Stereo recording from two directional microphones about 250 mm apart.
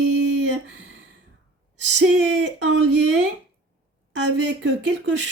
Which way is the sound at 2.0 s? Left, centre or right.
Right.